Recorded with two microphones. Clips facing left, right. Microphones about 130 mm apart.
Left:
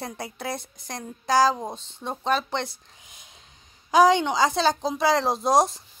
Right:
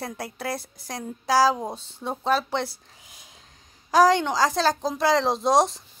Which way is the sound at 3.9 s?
Centre (ahead or behind).